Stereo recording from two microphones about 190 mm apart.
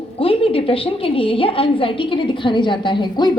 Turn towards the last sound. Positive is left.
turn(degrees=25)  # may be behind; listen again after turning